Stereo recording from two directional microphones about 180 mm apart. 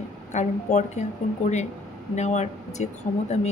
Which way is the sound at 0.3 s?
40° left (ahead or behind).